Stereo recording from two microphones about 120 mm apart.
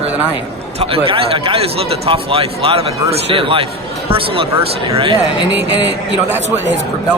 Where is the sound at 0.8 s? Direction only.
50° right (ahead or behind).